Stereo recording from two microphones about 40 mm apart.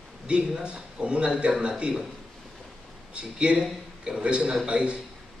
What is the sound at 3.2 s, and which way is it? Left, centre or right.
A man's voice, right.